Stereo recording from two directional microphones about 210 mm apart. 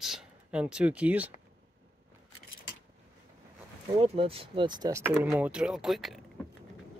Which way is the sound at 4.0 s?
25° right (ahead or behind).